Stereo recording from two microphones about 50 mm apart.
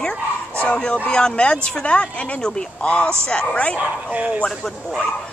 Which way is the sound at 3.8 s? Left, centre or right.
Right.